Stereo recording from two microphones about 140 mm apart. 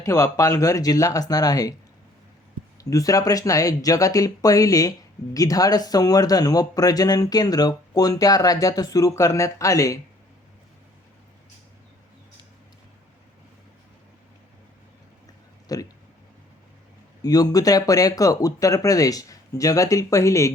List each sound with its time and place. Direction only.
0.0 s speech: 25° left (ahead or behind)
2.7 s speech: 25° left (ahead or behind)
15.7 s speech: 25° left (ahead or behind)
17.2 s speech: 25° left (ahead or behind)